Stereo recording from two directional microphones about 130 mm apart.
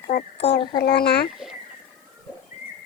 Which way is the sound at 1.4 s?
5° right (ahead or behind).